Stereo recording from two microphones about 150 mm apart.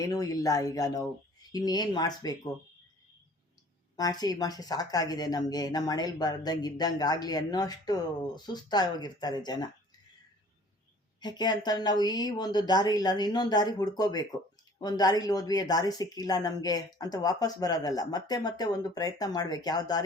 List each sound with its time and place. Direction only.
0.0 s speech: 25° left (ahead or behind)
3.9 s speech: 25° left (ahead or behind)
11.2 s speech: 30° left (ahead or behind)